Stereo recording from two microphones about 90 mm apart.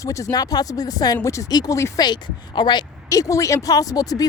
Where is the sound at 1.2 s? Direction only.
35° left (ahead or behind); by 2.8 s 55° left (ahead or behind).